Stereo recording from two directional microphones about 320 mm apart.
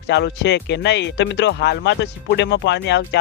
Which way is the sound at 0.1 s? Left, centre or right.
Left.